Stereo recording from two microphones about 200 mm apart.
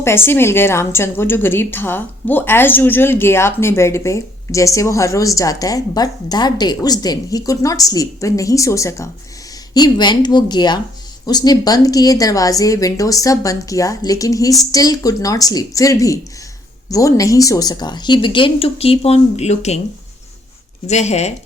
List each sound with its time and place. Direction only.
0.0 s a woman's voice: 10° left (ahead or behind); by 19.8 s 35° left (ahead or behind)
20.8 s speech: 35° left (ahead or behind)